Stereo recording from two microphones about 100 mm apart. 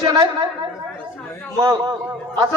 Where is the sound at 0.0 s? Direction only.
40° right (ahead or behind).